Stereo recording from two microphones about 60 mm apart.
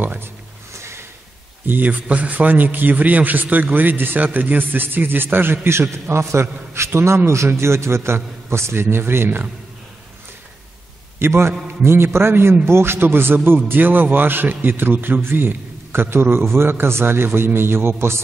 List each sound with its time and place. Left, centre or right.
0.0 s speech: right
0.7 s a sound: right
1.7 s a man's voice: right
11.1 s a man's voice: right